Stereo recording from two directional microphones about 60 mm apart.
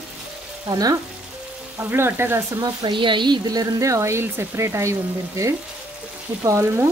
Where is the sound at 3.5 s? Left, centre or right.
Right.